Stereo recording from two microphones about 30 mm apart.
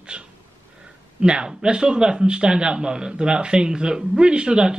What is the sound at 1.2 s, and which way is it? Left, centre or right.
A man's voice, right.